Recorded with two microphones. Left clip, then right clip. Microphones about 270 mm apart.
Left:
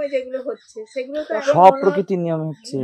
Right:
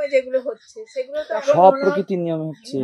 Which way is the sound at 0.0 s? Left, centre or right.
Right.